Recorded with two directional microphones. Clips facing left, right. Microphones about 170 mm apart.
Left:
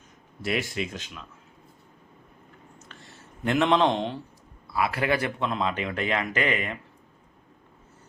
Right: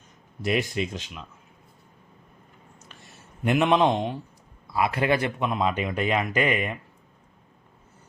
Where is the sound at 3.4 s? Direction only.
15° right (ahead or behind).